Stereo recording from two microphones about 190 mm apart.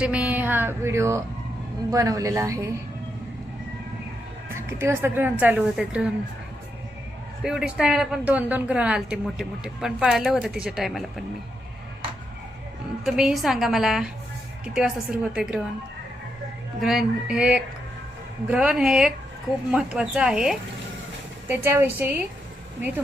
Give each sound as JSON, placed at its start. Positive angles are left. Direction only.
{"t": 0.0, "sound": "a woman's voice", "side_deg": -5}
{"t": 4.4, "sound": "a woman's voice", "side_deg": -15}
{"t": 7.4, "sound": "a woman's voice", "side_deg": -5}
{"t": 13.1, "sound": "a woman's voice", "side_deg": 0}
{"t": 16.8, "sound": "a woman's voice", "side_deg": 0}